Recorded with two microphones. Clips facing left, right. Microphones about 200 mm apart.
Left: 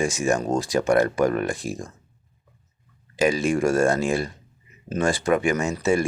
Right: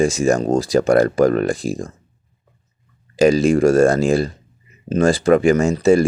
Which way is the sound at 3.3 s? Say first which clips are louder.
Right 7 dB; 35° right (ahead or behind).